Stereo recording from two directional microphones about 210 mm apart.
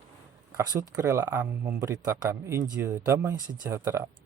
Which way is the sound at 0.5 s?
15° right (ahead or behind).